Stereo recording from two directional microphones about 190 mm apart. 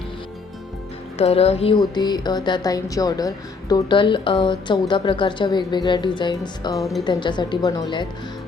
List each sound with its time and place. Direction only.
1.2 s speech: 30° left (ahead or behind)
2.0 s a woman's voice: 20° left (ahead or behind)